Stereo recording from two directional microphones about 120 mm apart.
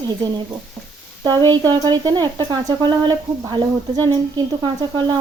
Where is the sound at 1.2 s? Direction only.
35° right (ahead or behind).